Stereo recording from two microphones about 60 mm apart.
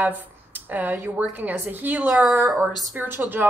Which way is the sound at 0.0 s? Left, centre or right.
Right.